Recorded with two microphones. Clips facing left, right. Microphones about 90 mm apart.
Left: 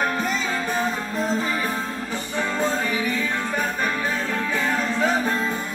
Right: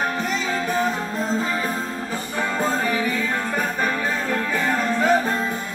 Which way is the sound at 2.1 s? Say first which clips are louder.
Right 1 dB; 10° right (ahead or behind).